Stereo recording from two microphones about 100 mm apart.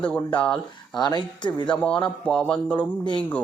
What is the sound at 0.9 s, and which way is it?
Speech, 45° left (ahead or behind).